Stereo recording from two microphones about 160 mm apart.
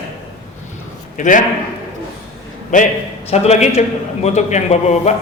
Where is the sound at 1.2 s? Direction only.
55° left (ahead or behind).